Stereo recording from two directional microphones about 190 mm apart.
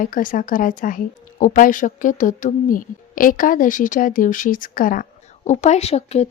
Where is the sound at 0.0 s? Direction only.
45° left (ahead or behind).